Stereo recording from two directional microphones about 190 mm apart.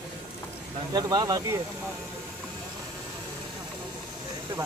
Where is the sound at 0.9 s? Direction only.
20° right (ahead or behind).